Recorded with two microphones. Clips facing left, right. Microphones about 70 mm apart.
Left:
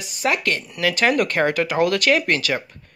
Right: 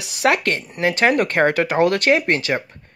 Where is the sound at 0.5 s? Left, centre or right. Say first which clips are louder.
Right 2 dB; right.